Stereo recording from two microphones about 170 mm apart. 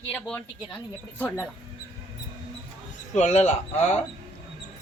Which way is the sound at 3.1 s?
40° left (ahead or behind).